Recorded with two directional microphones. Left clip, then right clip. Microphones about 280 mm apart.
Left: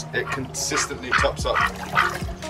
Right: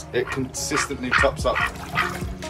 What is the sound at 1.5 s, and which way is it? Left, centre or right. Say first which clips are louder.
Music: left 1 dB; centre.